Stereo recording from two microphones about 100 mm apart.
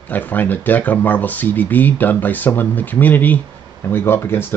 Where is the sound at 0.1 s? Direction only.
15° left (ahead or behind).